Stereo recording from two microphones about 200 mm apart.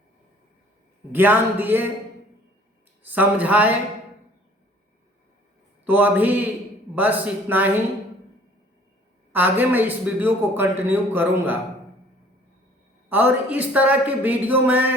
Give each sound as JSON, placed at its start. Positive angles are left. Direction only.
{"t": 1.1, "sound": "a man's voice", "side_deg": -10}
{"t": 3.0, "sound": "a man's voice", "side_deg": -10}
{"t": 5.8, "sound": "a man's voice", "side_deg": -10}
{"t": 9.3, "sound": "a man's voice", "side_deg": -10}
{"t": 13.1, "sound": "a man's voice", "side_deg": -10}